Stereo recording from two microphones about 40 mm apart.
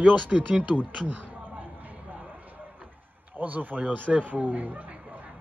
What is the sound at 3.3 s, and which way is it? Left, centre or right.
A man's voice, right.